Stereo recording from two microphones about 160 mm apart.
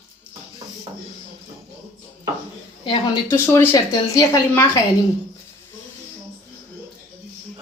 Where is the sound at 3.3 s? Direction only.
15° left (ahead or behind).